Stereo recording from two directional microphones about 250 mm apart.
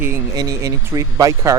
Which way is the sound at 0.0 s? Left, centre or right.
Centre.